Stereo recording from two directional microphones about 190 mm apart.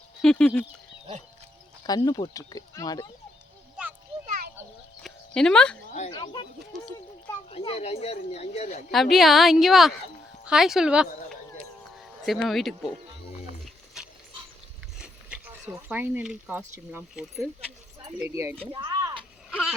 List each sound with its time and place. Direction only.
0.2 s a woman's voice: 5° left (ahead or behind)
1.9 s speech: 20° left (ahead or behind)
4.3 s a sound: 50° right (ahead or behind)
5.0 s chicken: 5° left (ahead or behind)
6.1 s speech: 25° left (ahead or behind)
8.9 s a woman's voice: centre (ahead or behind)
14.0 s dog: centre (ahead or behind)
14.9 s speech: 5° right (ahead or behind)
17.2 s a woman's voice: centre (ahead or behind)
18.2 s speech: 15° right (ahead or behind)
18.7 s a sound: 15° right (ahead or behind)
19.5 s a sound: centre (ahead or behind)